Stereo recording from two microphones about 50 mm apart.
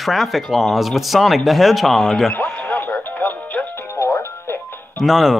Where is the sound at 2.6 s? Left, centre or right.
Left.